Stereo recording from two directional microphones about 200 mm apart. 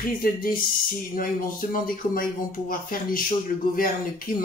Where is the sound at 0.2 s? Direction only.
45° left (ahead or behind).